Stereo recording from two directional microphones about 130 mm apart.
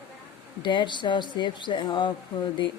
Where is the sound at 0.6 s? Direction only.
35° left (ahead or behind).